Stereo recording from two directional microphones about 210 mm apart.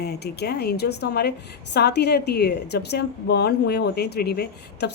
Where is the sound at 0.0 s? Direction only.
50° left (ahead or behind).